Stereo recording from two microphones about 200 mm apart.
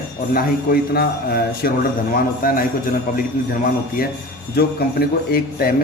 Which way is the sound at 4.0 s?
45° left (ahead or behind).